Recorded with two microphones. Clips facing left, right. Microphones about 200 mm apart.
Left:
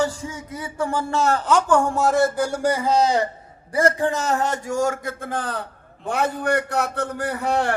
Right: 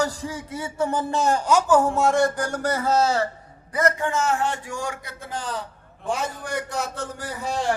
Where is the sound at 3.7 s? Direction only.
30° left (ahead or behind); by 7.8 s 60° left (ahead or behind).